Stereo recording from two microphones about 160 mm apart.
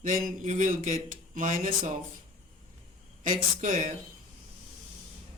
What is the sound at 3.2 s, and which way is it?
Speech, 50° right (ahead or behind).